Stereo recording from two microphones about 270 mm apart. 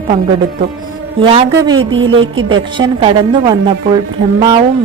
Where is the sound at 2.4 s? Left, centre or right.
Right.